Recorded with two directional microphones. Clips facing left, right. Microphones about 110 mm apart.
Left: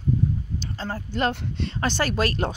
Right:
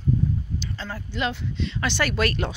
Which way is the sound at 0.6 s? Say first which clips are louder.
Left 2 dB; 40° left (ahead or behind).